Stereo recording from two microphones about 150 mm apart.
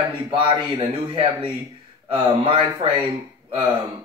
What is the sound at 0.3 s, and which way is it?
Speech, 35° right (ahead or behind).